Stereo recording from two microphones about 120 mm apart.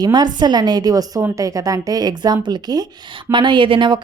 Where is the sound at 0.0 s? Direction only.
35° right (ahead or behind).